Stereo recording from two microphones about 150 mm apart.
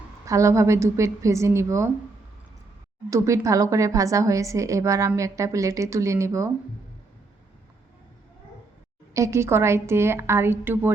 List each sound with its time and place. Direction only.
0.3 s a woman's voice: 20° right (ahead or behind)
3.1 s a woman's voice: 20° right (ahead or behind)
9.1 s a woman's voice: 20° right (ahead or behind)